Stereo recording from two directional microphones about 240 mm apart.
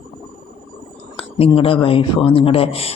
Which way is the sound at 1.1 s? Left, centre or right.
Left.